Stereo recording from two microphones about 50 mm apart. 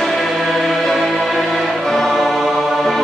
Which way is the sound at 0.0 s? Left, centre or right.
Centre.